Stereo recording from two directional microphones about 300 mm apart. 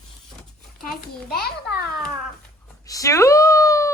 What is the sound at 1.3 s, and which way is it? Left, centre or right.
Speech, left.